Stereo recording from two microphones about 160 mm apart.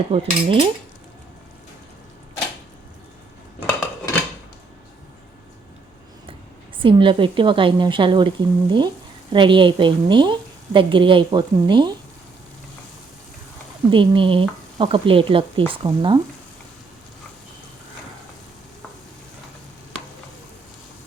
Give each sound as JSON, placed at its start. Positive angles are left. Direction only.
{"t": 0.1, "sound": "a woman's voice", "side_deg": -35}
{"t": 6.7, "sound": "a woman's voice", "side_deg": -30}
{"t": 13.9, "sound": "a woman's voice", "side_deg": -30}